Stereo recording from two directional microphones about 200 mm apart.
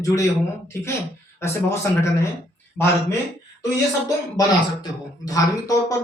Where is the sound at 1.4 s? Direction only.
15° left (ahead or behind).